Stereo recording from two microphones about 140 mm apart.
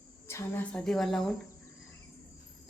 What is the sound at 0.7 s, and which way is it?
Speech, 5° left (ahead or behind).